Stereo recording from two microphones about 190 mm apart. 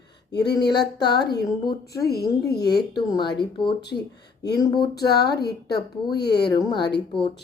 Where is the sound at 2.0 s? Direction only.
55° left (ahead or behind).